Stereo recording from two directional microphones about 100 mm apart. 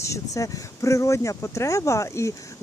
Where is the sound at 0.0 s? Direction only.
30° left (ahead or behind).